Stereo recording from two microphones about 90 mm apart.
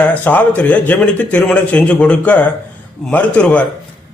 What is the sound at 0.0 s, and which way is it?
A man's voice, 15° left (ahead or behind).